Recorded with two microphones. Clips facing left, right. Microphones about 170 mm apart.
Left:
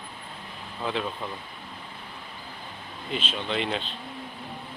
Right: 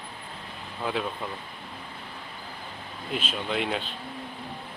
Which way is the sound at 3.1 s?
5° right (ahead or behind).